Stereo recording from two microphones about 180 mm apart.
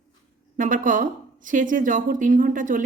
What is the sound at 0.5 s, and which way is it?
A woman's voice, 45° right (ahead or behind).